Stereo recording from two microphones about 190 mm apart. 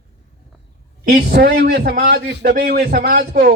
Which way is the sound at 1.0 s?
60° right (ahead or behind).